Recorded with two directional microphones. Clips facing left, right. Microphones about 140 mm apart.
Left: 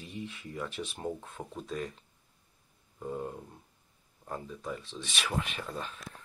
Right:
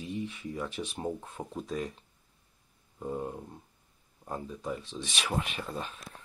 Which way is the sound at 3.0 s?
15° right (ahead or behind).